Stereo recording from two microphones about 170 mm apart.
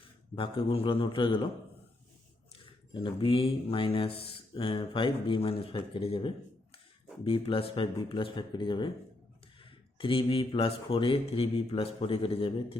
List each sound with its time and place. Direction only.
0.3 s speech: 30° left (ahead or behind)
2.6 s speech: 30° left (ahead or behind)
10.0 s speech: 30° left (ahead or behind)